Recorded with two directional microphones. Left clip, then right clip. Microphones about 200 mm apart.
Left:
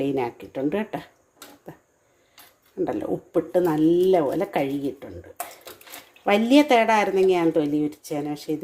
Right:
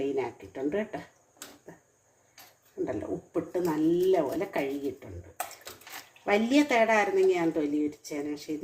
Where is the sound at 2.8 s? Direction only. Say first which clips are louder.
Left 7 dB; 50° left (ahead or behind).